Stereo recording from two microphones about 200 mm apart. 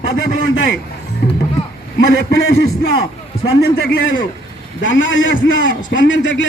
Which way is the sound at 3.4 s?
65° left (ahead or behind).